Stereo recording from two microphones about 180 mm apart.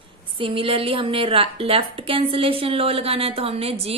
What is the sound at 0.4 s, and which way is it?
A woman's voice, 30° right (ahead or behind).